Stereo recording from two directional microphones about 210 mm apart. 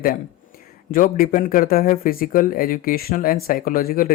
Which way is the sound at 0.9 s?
40° left (ahead or behind).